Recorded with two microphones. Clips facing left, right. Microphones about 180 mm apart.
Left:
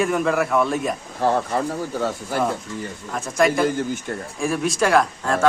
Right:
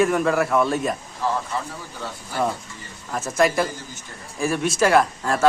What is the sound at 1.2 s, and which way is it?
Speech, 60° left (ahead or behind).